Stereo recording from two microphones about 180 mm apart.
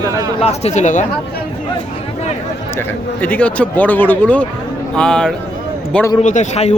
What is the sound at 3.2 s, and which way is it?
A man's voice, 10° left (ahead or behind).